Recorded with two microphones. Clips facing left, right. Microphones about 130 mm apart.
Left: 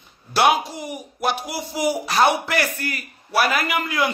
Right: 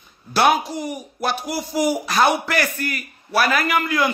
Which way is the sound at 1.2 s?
20° left (ahead or behind).